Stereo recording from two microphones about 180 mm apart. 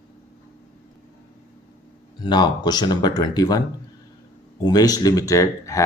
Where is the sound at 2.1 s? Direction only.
25° left (ahead or behind).